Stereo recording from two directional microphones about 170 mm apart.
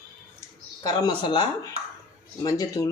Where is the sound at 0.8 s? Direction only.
25° left (ahead or behind).